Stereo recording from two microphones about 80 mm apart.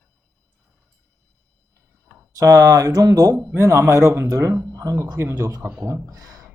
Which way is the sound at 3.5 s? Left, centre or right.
Right.